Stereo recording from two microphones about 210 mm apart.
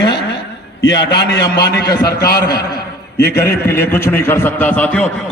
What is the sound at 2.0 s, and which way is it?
Speech, 45° left (ahead or behind).